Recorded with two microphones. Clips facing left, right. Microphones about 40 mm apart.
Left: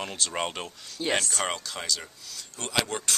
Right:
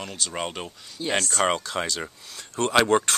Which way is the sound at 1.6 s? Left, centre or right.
Right.